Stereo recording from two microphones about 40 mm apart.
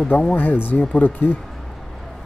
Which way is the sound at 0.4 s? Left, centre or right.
Left.